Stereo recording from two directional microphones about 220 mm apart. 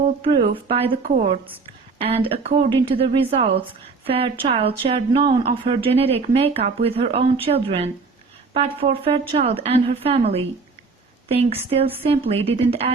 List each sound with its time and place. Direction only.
0.5 s speech: 25° right (ahead or behind)